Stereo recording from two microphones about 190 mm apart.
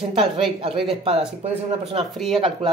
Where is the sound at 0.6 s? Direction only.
30° right (ahead or behind).